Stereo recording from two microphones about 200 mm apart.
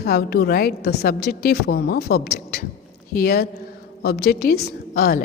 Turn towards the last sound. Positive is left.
turn(degrees=50)  # may be behind; listen again after turning